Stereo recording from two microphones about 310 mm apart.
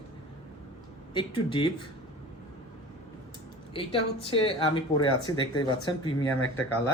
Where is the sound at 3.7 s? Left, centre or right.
Centre.